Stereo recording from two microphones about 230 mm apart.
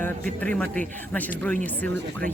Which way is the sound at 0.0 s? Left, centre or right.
Centre.